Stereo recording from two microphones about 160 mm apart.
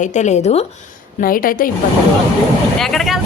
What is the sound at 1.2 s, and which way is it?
Speech, 60° left (ahead or behind).